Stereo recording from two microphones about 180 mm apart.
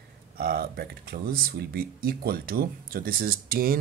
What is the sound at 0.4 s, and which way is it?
Speech, 55° right (ahead or behind).